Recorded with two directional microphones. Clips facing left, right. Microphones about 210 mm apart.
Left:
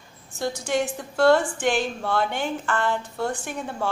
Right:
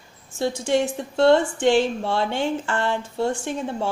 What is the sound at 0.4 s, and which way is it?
A woman's voice, 25° right (ahead or behind).